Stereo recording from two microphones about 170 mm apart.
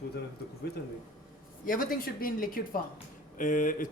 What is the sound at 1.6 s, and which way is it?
A woman's voice, 55° left (ahead or behind).